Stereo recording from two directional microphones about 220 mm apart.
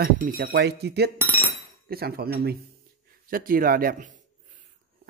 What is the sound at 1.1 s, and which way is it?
Dishes, 10° right (ahead or behind).